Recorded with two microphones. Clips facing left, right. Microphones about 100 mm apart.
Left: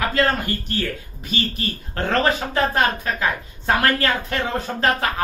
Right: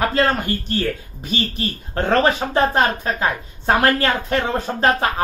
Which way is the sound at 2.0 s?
30° right (ahead or behind).